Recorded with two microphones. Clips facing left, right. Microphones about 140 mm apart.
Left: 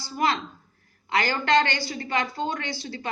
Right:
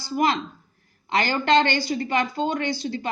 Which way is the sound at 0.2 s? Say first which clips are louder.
Right 2 dB; 20° right (ahead or behind).